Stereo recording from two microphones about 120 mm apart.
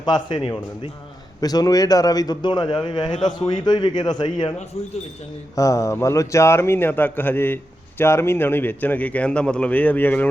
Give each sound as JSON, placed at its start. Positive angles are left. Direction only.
{"t": 0.0, "sound": "a man's voice", "side_deg": 40}
{"t": 1.4, "sound": "a man's voice", "side_deg": 30}
{"t": 5.5, "sound": "a man's voice", "side_deg": 25}